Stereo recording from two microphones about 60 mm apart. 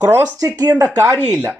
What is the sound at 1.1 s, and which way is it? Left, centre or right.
Speech, centre.